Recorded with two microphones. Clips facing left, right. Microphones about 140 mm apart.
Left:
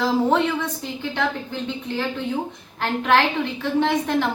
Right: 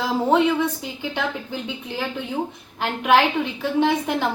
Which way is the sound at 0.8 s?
15° right (ahead or behind).